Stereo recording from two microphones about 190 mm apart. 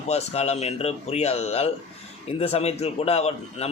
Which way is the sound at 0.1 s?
35° left (ahead or behind).